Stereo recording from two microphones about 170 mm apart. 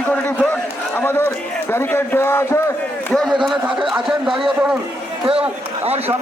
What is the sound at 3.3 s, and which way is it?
Speech, centre (ahead or behind).